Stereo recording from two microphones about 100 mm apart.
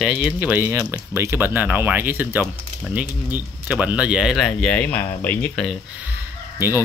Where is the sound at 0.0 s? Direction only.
5° right (ahead or behind).